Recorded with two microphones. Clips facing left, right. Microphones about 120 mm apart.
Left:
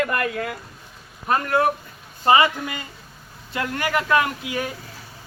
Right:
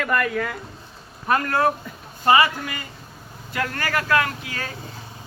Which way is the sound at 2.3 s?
20° left (ahead or behind).